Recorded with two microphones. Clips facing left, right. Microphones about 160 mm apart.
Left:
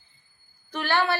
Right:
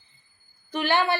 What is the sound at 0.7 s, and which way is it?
Speech, 15° right (ahead or behind).